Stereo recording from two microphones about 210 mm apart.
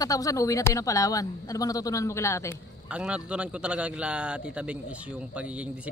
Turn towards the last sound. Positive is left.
turn(degrees=-5)  # may be behind; listen again after turning